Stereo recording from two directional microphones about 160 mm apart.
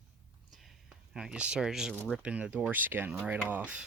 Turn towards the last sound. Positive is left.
turn(degrees=-10)  # may be behind; listen again after turning